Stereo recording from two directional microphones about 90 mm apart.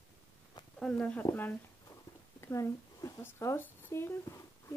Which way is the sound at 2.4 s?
35° left (ahead or behind).